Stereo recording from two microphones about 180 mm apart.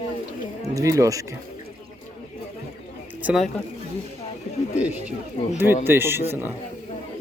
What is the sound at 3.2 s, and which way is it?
Speech, 5° right (ahead or behind).